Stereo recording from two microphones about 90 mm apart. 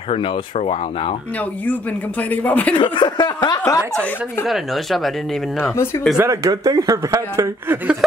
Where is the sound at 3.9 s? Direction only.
15° left (ahead or behind).